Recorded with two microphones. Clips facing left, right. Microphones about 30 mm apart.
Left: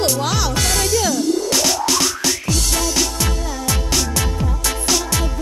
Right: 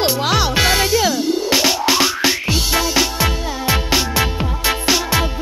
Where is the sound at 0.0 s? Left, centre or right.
Right.